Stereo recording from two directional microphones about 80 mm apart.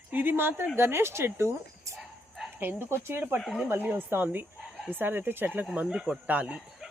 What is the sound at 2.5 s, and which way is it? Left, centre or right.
Speech, right.